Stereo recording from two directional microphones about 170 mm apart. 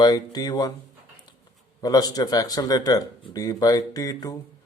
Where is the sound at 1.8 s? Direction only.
20° left (ahead or behind).